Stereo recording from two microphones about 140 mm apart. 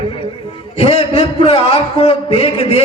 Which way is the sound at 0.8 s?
45° left (ahead or behind).